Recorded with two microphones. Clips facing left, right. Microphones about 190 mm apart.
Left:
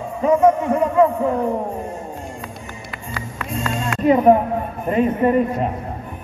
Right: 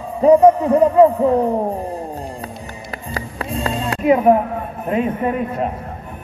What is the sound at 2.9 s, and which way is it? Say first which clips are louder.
Music: right 4 dB; 35° right (ahead or behind).